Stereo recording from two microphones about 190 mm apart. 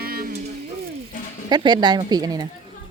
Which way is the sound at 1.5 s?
20° right (ahead or behind).